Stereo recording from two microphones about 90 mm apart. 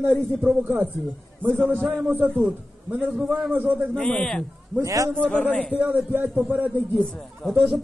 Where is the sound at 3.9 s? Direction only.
10° left (ahead or behind).